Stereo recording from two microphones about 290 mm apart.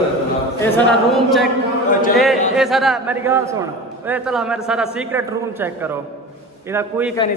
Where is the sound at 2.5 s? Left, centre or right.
Centre.